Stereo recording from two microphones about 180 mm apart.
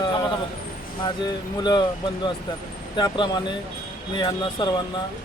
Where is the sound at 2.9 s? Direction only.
25° left (ahead or behind).